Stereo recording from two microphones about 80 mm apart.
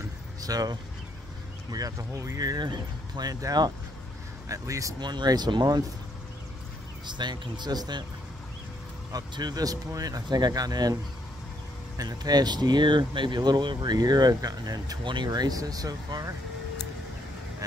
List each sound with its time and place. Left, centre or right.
0.4 s speech: right
5.0 s speech: right
7.1 s speech: right
9.3 s speech: right
12.0 s speech: right